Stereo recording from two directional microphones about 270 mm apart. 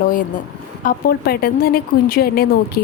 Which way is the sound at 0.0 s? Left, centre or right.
Left.